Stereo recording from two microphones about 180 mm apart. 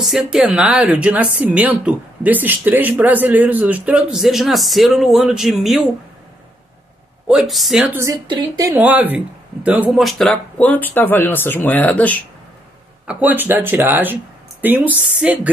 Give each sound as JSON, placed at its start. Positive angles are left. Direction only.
{"t": 0.0, "sound": "a woman's voice", "side_deg": 0}
{"t": 7.2, "sound": "a woman's voice", "side_deg": 0}
{"t": 8.7, "sound": "speech", "side_deg": -10}
{"t": 13.0, "sound": "speech", "side_deg": -10}